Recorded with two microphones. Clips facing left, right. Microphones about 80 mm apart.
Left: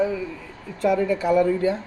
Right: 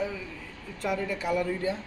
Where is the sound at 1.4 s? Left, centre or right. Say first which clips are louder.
Left 9 dB; left.